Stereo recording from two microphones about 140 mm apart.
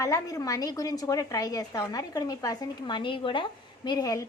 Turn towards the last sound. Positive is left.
turn(degrees=25)  # may be behind; listen again after turning